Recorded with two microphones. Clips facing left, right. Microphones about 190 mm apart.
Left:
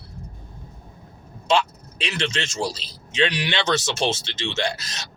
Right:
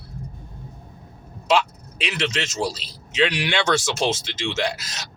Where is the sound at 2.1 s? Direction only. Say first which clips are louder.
Right 1 dB; 30° left (ahead or behind).